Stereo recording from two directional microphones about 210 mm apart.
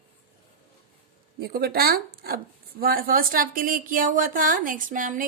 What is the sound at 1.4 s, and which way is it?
Speech, 50° right (ahead or behind).